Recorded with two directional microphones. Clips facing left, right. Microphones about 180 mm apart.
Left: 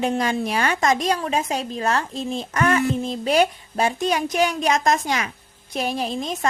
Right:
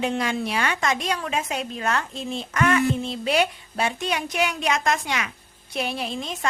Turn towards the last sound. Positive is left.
turn(degrees=40)  # may be behind; listen again after turning